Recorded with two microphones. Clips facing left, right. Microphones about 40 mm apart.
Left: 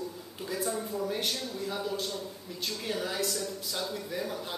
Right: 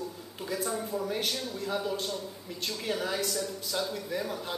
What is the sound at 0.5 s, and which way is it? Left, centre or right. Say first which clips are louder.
A man's voice: even; centre.